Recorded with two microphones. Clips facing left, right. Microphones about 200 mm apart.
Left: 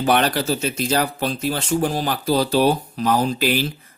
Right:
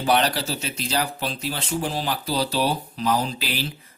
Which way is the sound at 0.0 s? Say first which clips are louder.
Left 3 dB; 55° left (ahead or behind).